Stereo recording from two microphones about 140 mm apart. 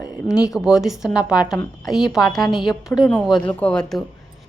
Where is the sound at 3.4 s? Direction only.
10° left (ahead or behind).